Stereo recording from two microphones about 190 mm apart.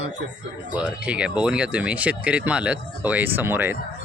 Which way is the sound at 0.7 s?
5° right (ahead or behind).